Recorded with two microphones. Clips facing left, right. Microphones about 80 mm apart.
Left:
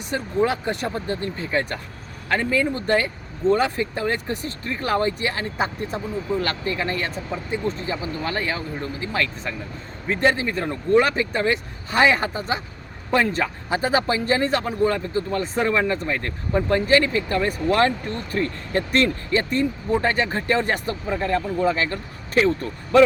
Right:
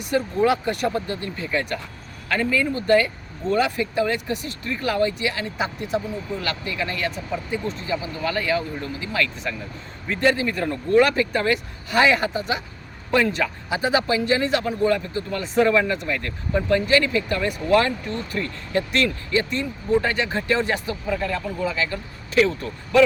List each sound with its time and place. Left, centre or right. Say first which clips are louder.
0.0 s speech: right 2 dB; left
21.1 s speech: left 2 dB; left